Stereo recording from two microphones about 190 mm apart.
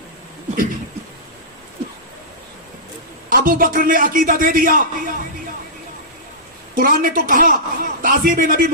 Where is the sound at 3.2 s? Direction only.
50° right (ahead or behind).